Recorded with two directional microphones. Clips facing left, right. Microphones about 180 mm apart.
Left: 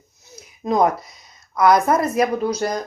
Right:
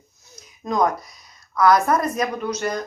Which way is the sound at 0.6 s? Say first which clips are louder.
Left 3 dB; 25° left (ahead or behind).